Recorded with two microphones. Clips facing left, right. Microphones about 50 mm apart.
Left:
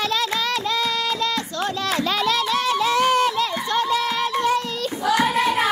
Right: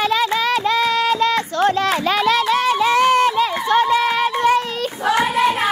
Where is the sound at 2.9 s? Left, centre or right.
Right.